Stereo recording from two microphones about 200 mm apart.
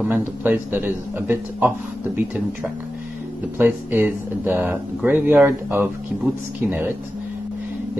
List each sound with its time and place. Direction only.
0.0 s speech: 10° right (ahead or behind)